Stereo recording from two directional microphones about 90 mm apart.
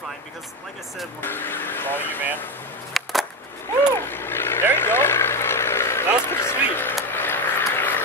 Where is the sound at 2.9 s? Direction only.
Centre (ahead or behind).